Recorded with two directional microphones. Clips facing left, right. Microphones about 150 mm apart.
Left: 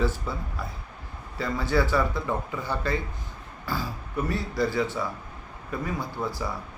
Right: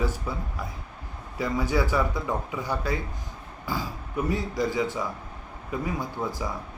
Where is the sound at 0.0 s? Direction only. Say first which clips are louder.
Left 1 dB; 15° right (ahead or behind).